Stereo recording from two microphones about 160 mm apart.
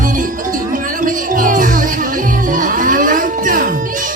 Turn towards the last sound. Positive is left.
turn(degrees=-55)  # may be behind; listen again after turning